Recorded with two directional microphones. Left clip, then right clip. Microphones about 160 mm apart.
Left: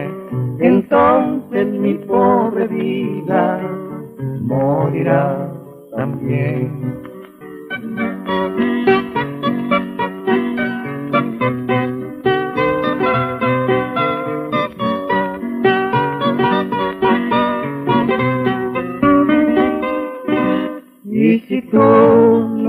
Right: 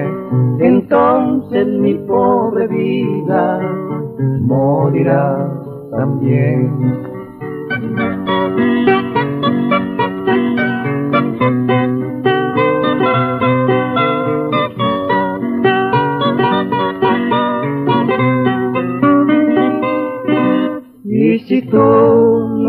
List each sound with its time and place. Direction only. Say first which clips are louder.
0.8 s music: right 1 dB; 35° right (ahead or behind)
5.2 s music: right 3 dB; 25° right (ahead or behind)
8.0 s music: right 3 dB; 30° right (ahead or behind)